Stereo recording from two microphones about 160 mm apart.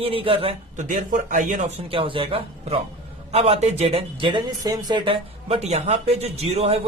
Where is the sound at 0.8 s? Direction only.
50° right (ahead or behind).